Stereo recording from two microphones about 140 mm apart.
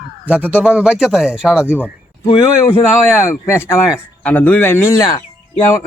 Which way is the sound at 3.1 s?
20° left (ahead or behind).